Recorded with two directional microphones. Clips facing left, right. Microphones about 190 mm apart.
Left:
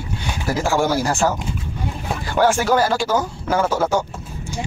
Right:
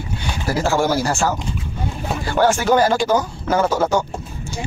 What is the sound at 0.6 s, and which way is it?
Speech, 15° left (ahead or behind).